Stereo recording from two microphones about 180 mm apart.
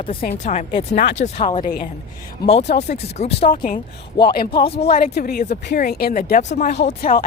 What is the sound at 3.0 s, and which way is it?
Speech, 35° left (ahead or behind).